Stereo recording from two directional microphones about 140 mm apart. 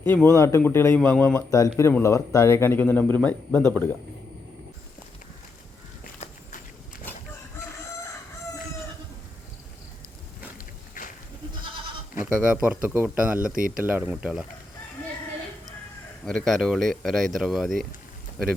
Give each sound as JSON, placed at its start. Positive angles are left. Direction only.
{"t": 0.0, "sound": "speech", "side_deg": 15}
{"t": 1.5, "sound": "speech", "side_deg": 25}
{"t": 6.2, "sound": "walk", "side_deg": 45}
{"t": 12.2, "sound": "speech", "side_deg": -5}
{"t": 13.6, "sound": "speech", "side_deg": -90}
{"t": 13.8, "sound": "speech", "side_deg": -10}
{"t": 16.2, "sound": "speech", "side_deg": 5}